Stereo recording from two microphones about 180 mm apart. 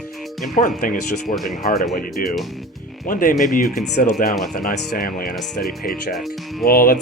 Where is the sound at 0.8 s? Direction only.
50° left (ahead or behind).